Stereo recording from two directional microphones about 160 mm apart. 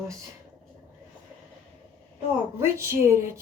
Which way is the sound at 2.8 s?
15° right (ahead or behind).